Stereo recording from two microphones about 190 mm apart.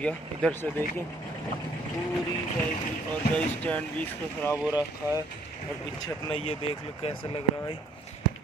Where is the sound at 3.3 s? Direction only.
5° left (ahead or behind).